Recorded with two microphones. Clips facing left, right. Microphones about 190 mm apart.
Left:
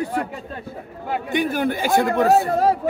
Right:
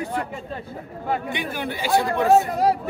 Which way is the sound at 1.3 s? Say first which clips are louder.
Left 7 dB; 45° left (ahead or behind).